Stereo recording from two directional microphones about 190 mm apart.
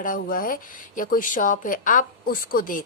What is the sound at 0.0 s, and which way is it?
A woman's voice, 45° left (ahead or behind).